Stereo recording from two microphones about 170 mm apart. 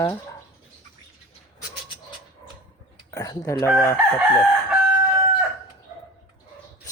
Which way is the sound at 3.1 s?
20° left (ahead or behind).